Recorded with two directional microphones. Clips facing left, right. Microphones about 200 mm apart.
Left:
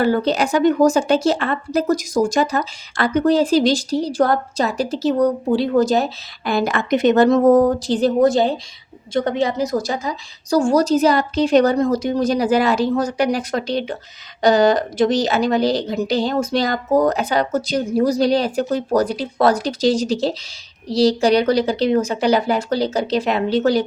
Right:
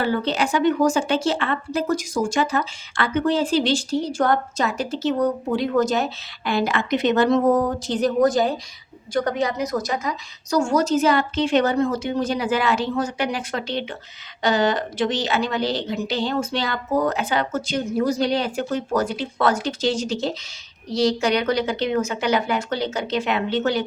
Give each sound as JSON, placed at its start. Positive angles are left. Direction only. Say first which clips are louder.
{"t": 0.0, "sound": "speech", "louder": "left 5 dB", "side_deg": 45}